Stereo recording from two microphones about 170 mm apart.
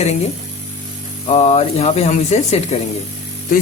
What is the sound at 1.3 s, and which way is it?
Speech, 40° left (ahead or behind).